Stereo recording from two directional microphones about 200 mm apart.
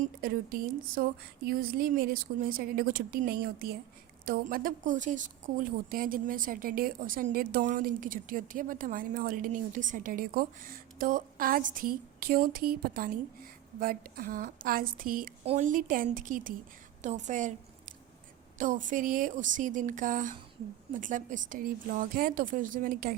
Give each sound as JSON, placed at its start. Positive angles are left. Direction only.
{"t": 0.2, "sound": "a woman's voice", "side_deg": -45}
{"t": 18.5, "sound": "a woman's voice", "side_deg": -40}